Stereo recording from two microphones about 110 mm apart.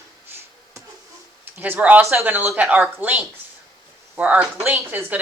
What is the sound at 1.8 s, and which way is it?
A woman's voice, 15° right (ahead or behind).